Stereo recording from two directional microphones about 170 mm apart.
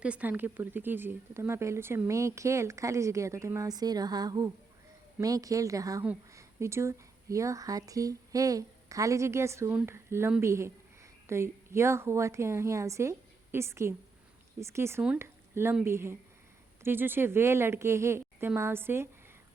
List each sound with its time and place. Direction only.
0.0 s speech: 10° right (ahead or behind)